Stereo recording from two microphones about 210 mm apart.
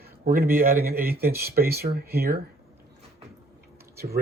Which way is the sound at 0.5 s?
40° right (ahead or behind).